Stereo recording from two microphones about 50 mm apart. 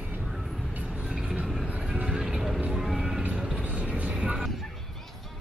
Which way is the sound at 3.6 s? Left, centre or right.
Right.